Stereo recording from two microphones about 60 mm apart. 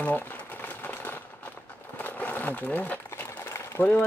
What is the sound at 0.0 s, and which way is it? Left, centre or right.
Sewing machine, left.